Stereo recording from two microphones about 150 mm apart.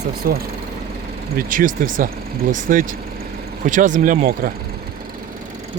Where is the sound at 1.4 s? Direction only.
65° right (ahead or behind).